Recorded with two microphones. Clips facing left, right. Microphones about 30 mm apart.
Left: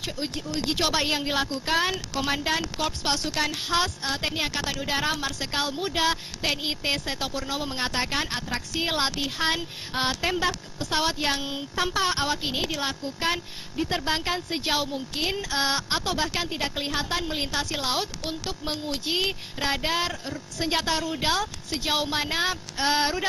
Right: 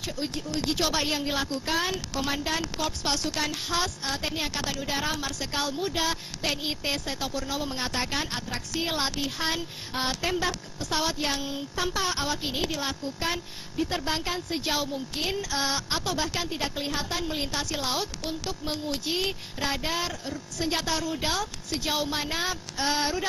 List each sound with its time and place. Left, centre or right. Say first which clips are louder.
0.3 s speech: left 1 dB; centre
0.7 s a woman's voice: left 2 dB; centre
4.7 s a woman's voice: left 3 dB; left